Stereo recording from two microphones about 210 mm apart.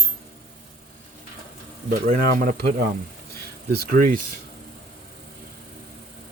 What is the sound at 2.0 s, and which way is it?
Speech, 40° right (ahead or behind).